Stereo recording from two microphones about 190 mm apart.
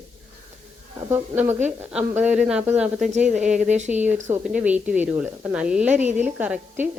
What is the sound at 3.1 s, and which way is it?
Speech, 40° right (ahead or behind).